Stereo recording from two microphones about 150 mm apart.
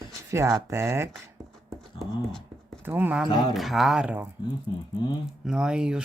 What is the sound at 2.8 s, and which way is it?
Speech, 15° right (ahead or behind).